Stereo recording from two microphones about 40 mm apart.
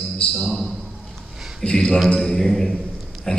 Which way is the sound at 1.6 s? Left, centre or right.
Centre.